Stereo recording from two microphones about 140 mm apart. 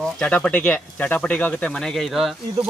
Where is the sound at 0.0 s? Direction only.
10° left (ahead or behind).